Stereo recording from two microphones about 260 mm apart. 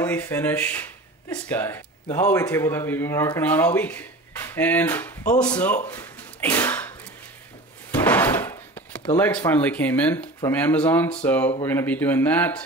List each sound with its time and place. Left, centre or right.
0.0 s speech: centre
5.9 s a sound: centre
7.9 s speech: centre